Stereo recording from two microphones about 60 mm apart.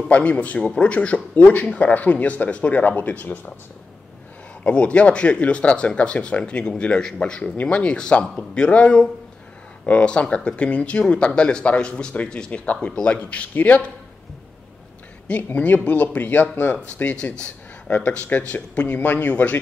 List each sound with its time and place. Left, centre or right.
0.1 s speech: left
4.6 s speech: left
15.2 s speech: left